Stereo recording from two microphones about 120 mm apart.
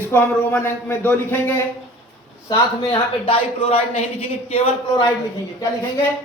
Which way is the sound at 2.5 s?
45° left (ahead or behind).